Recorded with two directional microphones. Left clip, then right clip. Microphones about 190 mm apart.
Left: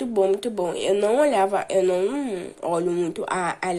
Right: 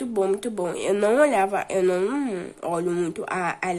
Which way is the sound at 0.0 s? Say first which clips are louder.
Left 3 dB; 15° right (ahead or behind).